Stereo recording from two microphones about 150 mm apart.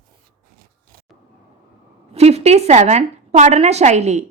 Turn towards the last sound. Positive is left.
turn(degrees=-50)  # may be behind; listen again after turning